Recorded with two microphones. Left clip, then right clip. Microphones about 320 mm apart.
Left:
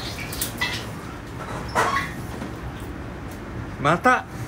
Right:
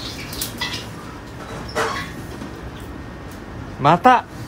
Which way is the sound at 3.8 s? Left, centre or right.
Right.